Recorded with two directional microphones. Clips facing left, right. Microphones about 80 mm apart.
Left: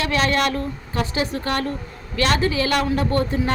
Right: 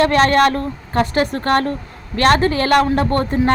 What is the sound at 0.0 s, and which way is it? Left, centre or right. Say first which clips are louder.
Speech: right 8 dB; right.